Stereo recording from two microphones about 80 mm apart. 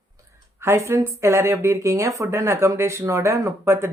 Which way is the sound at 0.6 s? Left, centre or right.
Right.